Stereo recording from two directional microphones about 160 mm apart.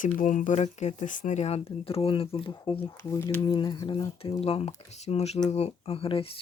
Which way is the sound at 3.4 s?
25° left (ahead or behind).